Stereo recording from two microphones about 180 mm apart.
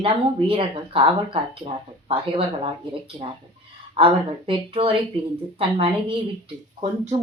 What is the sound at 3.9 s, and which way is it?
Speech, 30° right (ahead or behind).